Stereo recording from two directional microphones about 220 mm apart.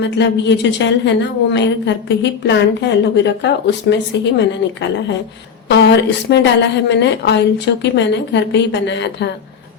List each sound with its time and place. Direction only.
0.0 s a woman's voice: 55° left (ahead or behind)